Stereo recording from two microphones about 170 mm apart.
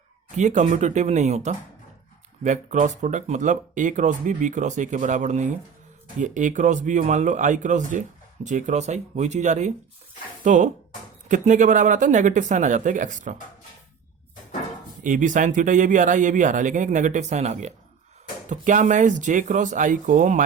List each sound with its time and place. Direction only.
0.3 s speech: 45° right (ahead or behind)
15.0 s speech: 50° right (ahead or behind)